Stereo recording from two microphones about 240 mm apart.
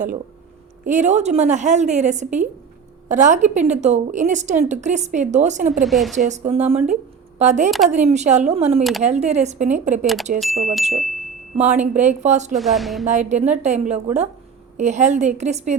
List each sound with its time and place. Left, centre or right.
0.9 s a woman's voice: right
5.8 s speech: centre
6.1 s a woman's voice: right
8.8 s speech: centre
9.0 s a woman's voice: right
10.4 s speech: centre
11.5 s a woman's voice: right
12.5 s speech: centre
13.1 s a woman's voice: right